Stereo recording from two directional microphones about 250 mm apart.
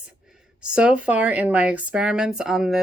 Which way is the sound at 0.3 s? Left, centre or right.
Centre.